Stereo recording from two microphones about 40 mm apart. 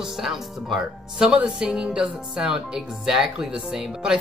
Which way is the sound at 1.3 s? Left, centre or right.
Right.